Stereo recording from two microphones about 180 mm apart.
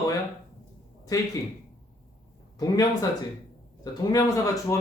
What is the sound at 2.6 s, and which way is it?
Speech, 20° left (ahead or behind).